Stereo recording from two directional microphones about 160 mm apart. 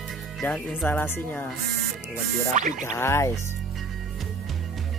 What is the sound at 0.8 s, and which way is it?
Speech, 15° left (ahead or behind).